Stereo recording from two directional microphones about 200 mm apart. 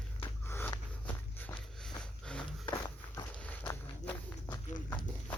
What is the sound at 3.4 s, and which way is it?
Walk, 10° left (ahead or behind).